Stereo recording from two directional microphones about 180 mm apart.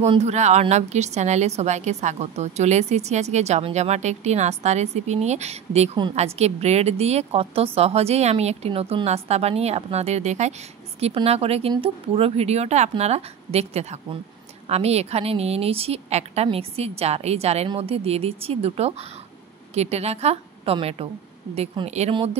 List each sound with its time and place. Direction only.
0.0 s a woman's voice: 35° right (ahead or behind)